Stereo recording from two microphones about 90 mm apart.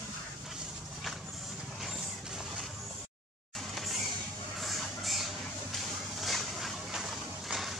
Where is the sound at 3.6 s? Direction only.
Centre (ahead or behind).